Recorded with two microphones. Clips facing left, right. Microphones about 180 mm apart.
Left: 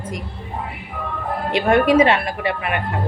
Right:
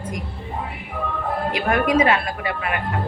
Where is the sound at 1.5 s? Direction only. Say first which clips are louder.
Left 6 dB; 30° left (ahead or behind).